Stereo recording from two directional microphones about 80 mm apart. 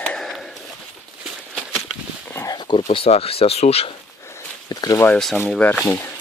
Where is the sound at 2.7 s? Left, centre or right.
Left.